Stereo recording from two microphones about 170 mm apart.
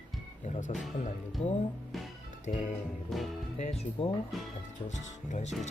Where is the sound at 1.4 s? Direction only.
40° left (ahead or behind).